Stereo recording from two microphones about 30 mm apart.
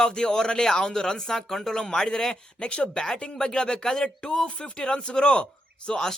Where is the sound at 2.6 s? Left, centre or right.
Left.